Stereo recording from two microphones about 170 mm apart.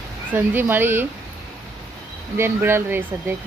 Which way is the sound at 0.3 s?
10° right (ahead or behind).